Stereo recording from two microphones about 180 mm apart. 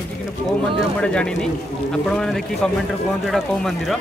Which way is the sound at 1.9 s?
5° left (ahead or behind).